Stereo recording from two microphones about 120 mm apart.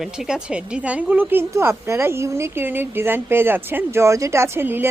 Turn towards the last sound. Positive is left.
turn(degrees=-20)  # may be behind; listen again after turning